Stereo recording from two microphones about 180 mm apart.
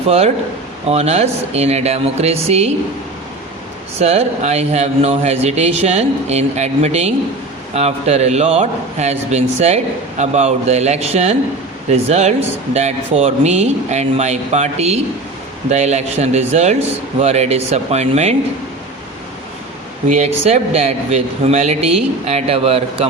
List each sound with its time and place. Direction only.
0.9 s a man's voice: 35° right (ahead or behind)
4.0 s a man's voice: 35° right (ahead or behind)
20.1 s a man's voice: 35° right (ahead or behind)